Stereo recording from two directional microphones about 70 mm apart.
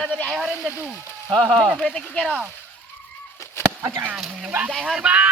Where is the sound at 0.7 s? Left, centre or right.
Right.